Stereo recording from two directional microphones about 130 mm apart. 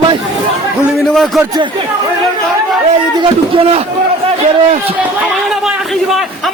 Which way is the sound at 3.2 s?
45° right (ahead or behind).